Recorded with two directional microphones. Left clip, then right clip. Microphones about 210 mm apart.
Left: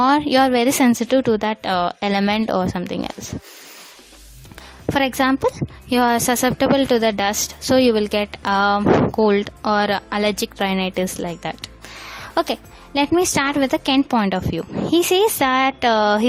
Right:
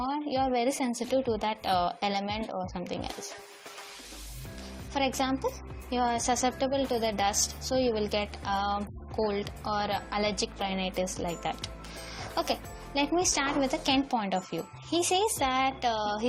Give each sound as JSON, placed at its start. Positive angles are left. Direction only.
{"t": 0.0, "sound": "a woman's voice", "side_deg": 55}
{"t": 4.9, "sound": "speech", "side_deg": 45}
{"t": 12.3, "sound": "speech", "side_deg": 50}